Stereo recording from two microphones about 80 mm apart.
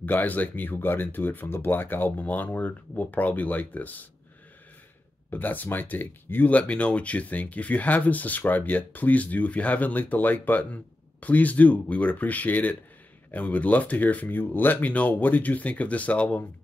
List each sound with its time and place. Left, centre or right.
0.0 s speech: left
5.3 s speech: left